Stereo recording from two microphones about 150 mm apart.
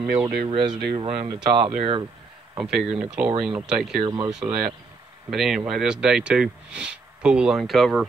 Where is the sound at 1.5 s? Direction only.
35° right (ahead or behind).